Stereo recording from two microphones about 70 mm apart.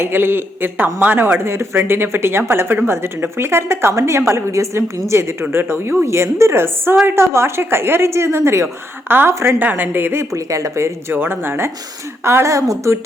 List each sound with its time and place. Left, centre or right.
0.0 s a woman's voice: right
11.1 s a woman's voice: right